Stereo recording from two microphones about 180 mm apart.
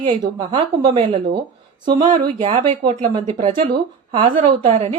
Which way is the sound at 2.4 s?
30° right (ahead or behind).